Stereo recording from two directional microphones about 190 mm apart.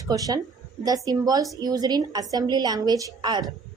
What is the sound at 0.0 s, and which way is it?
A woman's voice, 20° right (ahead or behind).